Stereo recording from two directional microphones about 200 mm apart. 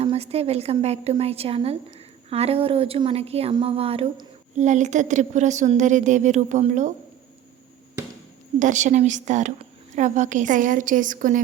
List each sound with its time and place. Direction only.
0.0 s a woman's voice: 30° right (ahead or behind)
8.5 s a woman's voice: 40° right (ahead or behind)